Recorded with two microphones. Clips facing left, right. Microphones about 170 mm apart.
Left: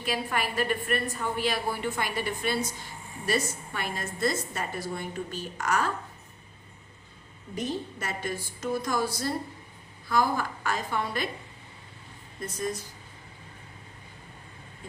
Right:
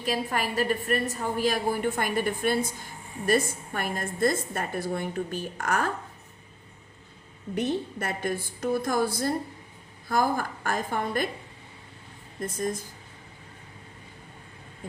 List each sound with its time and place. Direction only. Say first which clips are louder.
0.0 s a woman's voice: right 2 dB; 40° right (ahead or behind)
7.5 s a woman's voice: right 4 dB; 65° right (ahead or behind)
12.4 s a woman's voice: right 3 dB; 50° right (ahead or behind)